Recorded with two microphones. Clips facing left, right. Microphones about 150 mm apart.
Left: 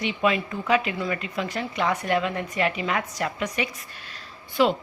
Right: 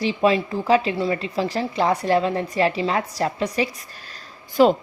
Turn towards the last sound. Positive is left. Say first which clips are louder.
# right 6 dB
turn(degrees=-40)  # may be behind; listen again after turning